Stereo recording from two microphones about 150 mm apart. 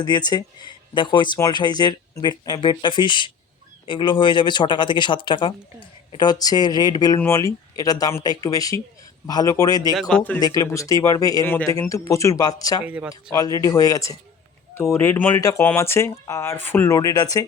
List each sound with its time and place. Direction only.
0.0 s speech: 25° left (ahead or behind)
9.9 s speech: 5° left (ahead or behind)
10.4 s speech: 25° left (ahead or behind)
12.8 s speech: 10° right (ahead or behind)
13.3 s speech: 25° left (ahead or behind)